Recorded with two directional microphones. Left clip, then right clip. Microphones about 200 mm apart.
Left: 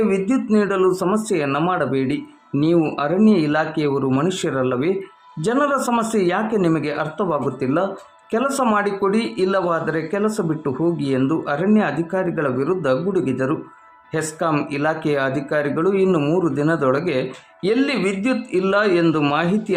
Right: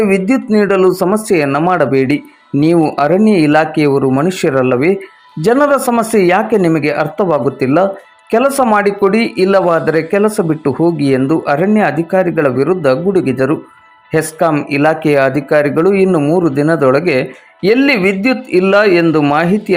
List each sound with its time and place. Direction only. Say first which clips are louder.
0.0 s speech: right 7 dB; 25° right (ahead or behind)
2.5 s speech: right 8 dB; 20° right (ahead or behind)
3.2 s speech: right 8 dB; 30° right (ahead or behind)
16.0 s speech: right 7 dB; 15° right (ahead or behind)
16.6 s speech: right 8 dB; 25° right (ahead or behind)